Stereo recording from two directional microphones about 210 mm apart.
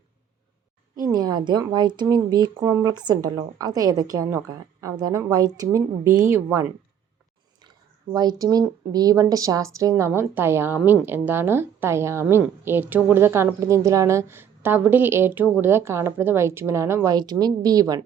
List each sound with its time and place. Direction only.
0.9 s a woman's voice: 15° right (ahead or behind)
8.1 s a woman's voice: 20° right (ahead or behind)